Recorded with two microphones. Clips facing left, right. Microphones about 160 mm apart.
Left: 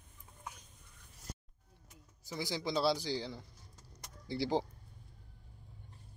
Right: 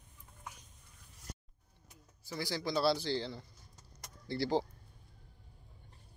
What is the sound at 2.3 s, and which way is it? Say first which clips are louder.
A man's voice: even; 20° left (ahead or behind).